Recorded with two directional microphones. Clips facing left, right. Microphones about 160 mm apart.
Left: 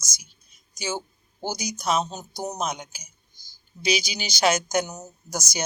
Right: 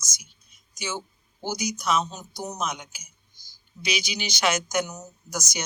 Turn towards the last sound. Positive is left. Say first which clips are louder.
# left 1 dB
turn(degrees=30)  # may be behind; listen again after turning